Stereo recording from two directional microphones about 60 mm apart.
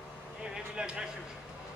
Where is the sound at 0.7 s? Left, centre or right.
Centre.